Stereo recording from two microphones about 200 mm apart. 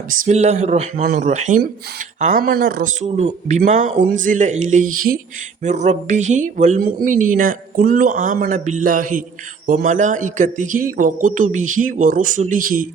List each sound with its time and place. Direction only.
0.1 s speech: 40° right (ahead or behind)